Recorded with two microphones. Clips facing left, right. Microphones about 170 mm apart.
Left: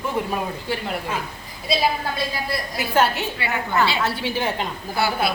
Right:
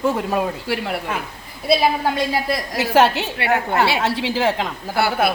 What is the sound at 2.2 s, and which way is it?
A woman's voice, 85° right.